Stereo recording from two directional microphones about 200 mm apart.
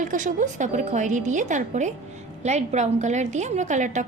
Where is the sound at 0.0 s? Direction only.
40° right (ahead or behind).